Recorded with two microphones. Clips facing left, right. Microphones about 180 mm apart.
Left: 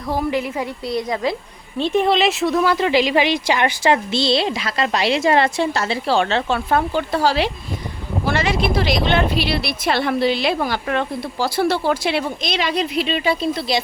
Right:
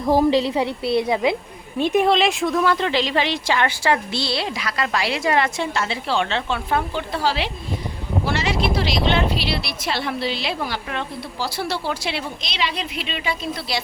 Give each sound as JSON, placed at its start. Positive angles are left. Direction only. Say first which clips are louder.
{"t": 0.1, "sound": "a woman's voice", "louder": "right 5 dB", "side_deg": -40}
{"t": 1.0, "sound": "speech", "louder": "right 2 dB", "side_deg": -15}
{"t": 2.0, "sound": "speech", "louder": "left 1 dB", "side_deg": 0}
{"t": 13.6, "sound": "speech", "louder": "left 6 dB", "side_deg": 20}